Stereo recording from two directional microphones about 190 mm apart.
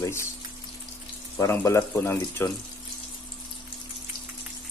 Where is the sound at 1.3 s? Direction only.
15° left (ahead or behind).